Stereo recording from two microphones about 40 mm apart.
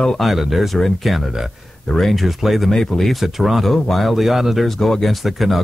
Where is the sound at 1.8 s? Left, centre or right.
Centre.